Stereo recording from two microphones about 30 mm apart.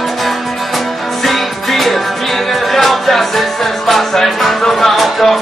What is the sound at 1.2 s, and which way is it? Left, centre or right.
Music, centre.